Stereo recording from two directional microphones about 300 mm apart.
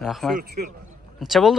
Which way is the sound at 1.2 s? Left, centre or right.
Centre.